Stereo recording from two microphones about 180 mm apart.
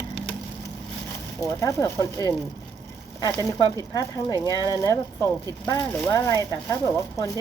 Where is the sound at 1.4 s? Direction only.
20° left (ahead or behind).